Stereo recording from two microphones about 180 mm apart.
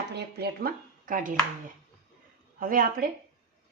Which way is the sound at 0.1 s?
65° right (ahead or behind).